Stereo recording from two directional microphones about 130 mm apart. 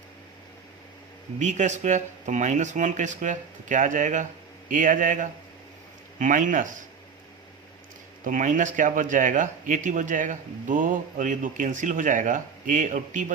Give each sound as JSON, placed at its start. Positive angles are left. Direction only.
{"t": 1.4, "sound": "speech", "side_deg": -70}
{"t": 4.7, "sound": "speech", "side_deg": -90}
{"t": 8.2, "sound": "speech", "side_deg": -85}